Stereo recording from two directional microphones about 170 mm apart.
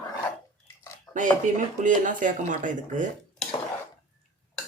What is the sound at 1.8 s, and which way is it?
Speech, 50° right (ahead or behind).